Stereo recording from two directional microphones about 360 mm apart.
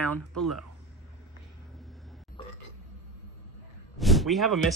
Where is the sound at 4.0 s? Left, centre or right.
Centre.